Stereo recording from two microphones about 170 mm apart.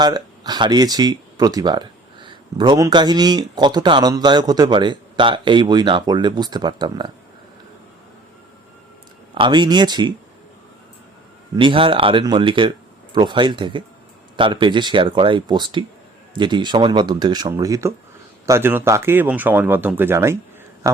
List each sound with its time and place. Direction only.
0.0 s speech: 25° right (ahead or behind)
9.3 s speech: 30° right (ahead or behind)
11.5 s a man's voice: 30° right (ahead or behind)